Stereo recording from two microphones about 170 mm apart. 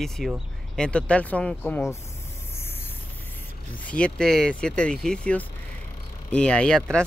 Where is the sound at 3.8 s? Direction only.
5° left (ahead or behind).